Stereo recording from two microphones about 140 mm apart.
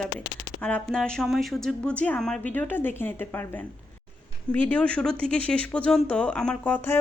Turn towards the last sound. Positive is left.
turn(degrees=15)  # may be behind; listen again after turning